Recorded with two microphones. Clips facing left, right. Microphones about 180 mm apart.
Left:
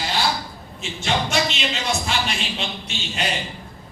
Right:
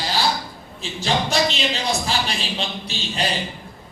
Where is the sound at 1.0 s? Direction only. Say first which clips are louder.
Right 2 dB; 35° right (ahead or behind).